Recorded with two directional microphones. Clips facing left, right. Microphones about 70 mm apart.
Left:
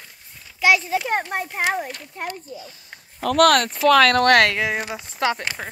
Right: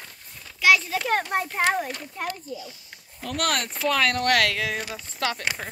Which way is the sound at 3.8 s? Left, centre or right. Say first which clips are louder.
Left 8 dB; left.